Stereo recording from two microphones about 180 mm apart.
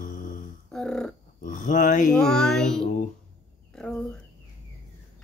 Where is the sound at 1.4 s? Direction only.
45° left (ahead or behind).